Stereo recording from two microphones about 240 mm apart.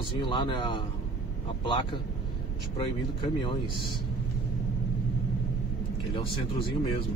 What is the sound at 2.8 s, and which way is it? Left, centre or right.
Speech, left.